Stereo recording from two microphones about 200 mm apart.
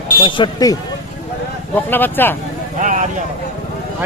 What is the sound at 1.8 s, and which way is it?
Speech, 10° left (ahead or behind).